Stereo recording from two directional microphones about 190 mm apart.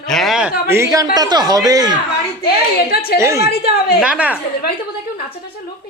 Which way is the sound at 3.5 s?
55° left (ahead or behind).